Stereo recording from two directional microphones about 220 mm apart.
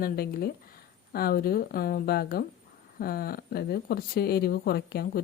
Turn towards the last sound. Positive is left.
turn(degrees=45)  # may be behind; listen again after turning